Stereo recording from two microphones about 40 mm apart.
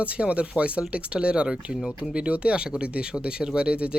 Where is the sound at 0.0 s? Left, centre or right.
Right.